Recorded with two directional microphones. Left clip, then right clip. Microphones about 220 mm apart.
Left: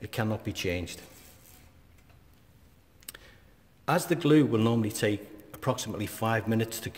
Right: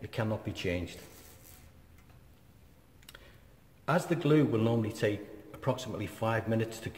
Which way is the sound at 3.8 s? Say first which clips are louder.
Left 3 dB; 45° left (ahead or behind).